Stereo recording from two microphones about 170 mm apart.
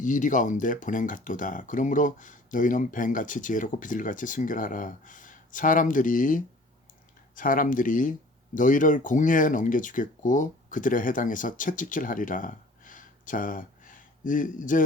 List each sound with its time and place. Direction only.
0.0 s speech: 50° left (ahead or behind)